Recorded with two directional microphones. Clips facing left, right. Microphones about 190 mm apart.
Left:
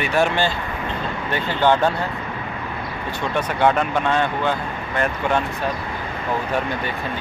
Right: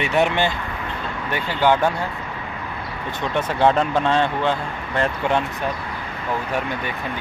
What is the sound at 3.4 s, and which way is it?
Speech, 30° right (ahead or behind).